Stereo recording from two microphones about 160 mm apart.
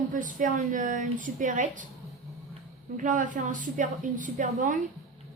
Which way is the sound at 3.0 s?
55° right (ahead or behind).